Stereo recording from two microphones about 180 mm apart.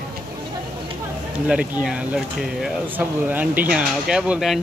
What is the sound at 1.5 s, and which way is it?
Speech, 5° right (ahead or behind).